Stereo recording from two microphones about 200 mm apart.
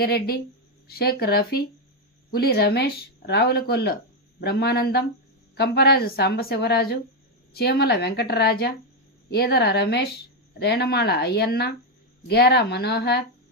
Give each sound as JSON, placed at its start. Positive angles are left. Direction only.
{"t": 0.0, "sound": "speech", "side_deg": 50}